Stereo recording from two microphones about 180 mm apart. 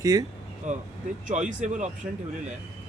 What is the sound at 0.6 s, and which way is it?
Speech, 40° right (ahead or behind).